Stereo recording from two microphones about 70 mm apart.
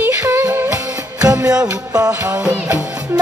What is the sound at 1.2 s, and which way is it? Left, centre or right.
Music, right.